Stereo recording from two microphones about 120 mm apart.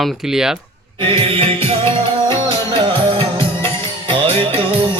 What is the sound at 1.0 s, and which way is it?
Music, 45° right (ahead or behind).